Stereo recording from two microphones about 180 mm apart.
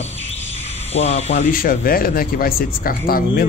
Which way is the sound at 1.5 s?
55° left (ahead or behind).